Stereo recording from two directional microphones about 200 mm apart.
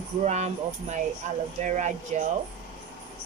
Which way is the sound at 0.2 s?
35° right (ahead or behind).